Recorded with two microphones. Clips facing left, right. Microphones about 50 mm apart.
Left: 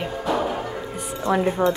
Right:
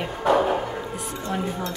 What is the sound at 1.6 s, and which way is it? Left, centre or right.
Speech, left.